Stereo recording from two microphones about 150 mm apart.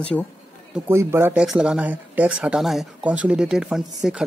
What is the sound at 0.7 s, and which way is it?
Speech, 15° right (ahead or behind).